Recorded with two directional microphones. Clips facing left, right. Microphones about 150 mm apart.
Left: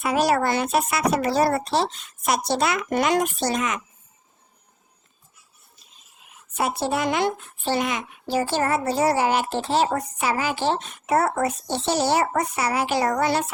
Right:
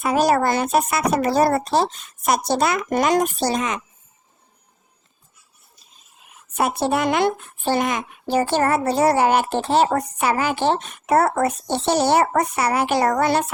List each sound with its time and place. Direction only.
0.0 s speech: 45° right (ahead or behind)
6.6 s speech: 60° right (ahead or behind)